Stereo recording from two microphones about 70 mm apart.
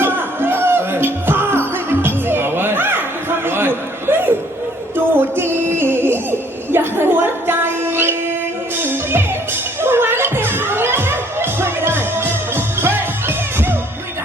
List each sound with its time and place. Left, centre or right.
0.0 s music: right